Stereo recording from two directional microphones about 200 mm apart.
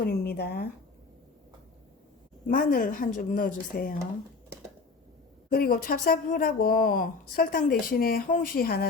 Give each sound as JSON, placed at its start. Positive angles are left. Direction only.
{"t": 0.0, "sound": "a woman's voice", "side_deg": 50}
{"t": 2.5, "sound": "a woman's voice", "side_deg": 45}
{"t": 5.5, "sound": "a woman's voice", "side_deg": 50}